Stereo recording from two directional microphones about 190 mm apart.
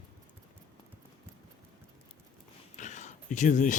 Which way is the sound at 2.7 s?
40° left (ahead or behind).